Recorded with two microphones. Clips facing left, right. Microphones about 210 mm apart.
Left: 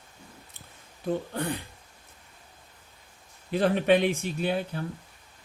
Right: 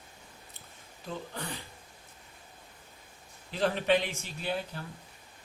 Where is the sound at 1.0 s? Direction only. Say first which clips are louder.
Left 10 dB; 55° left (ahead or behind).